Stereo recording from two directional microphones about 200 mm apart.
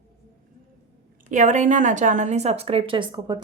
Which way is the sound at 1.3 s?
40° right (ahead or behind).